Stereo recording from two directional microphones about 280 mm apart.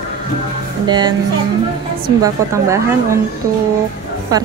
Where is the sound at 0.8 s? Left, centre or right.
Centre.